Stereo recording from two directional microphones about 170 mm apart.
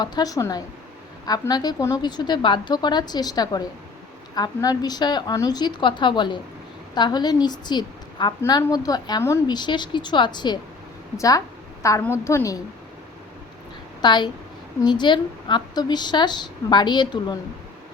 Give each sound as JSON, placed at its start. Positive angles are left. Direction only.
{"t": 0.0, "sound": "a woman's voice", "side_deg": 25}
{"t": 14.0, "sound": "a woman's voice", "side_deg": 25}